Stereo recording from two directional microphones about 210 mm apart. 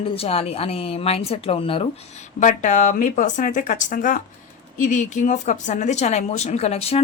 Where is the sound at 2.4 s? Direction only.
35° left (ahead or behind).